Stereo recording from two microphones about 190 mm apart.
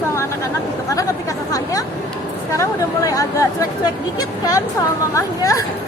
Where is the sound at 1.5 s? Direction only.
20° left (ahead or behind).